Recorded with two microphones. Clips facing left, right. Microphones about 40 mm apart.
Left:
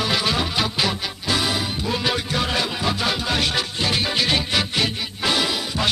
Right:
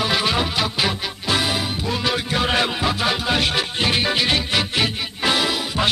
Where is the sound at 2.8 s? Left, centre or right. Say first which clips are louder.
Right 2 dB; centre.